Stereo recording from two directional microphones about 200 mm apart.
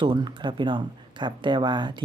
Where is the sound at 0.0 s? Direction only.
20° right (ahead or behind).